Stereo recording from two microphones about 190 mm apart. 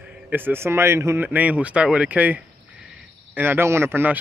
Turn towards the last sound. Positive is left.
turn(degrees=-10)  # may be behind; listen again after turning